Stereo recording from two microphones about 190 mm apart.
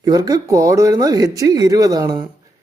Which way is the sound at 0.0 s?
20° right (ahead or behind).